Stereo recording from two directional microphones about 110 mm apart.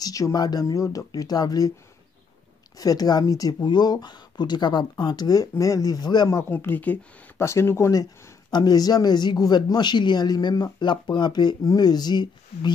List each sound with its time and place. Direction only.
0.0 s speech: 35° left (ahead or behind)
2.8 s speech: 35° left (ahead or behind)
6.2 s speech: 25° left (ahead or behind); by 12.7 s 40° left (ahead or behind)